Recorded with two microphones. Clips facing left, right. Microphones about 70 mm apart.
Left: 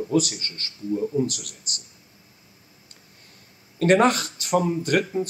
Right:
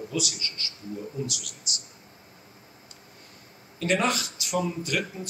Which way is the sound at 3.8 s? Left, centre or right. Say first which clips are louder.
Left 7 dB; left.